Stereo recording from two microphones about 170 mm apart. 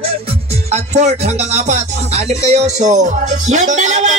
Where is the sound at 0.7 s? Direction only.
40° right (ahead or behind).